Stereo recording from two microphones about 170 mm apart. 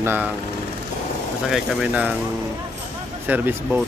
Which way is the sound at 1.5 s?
5° right (ahead or behind).